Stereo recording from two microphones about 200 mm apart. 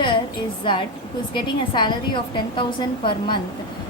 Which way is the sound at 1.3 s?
20° left (ahead or behind).